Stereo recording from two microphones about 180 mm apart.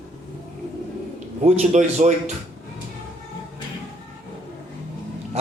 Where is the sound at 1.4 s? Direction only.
40° right (ahead or behind).